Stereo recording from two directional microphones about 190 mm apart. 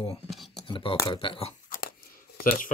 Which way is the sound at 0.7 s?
30° left (ahead or behind).